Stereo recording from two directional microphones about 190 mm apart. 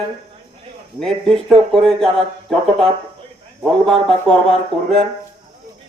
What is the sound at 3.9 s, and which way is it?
Speech, centre (ahead or behind).